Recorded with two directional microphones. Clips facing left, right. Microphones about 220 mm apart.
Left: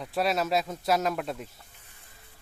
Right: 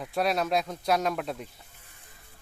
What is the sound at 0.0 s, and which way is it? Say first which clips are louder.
Speech: even; centre (ahead or behind).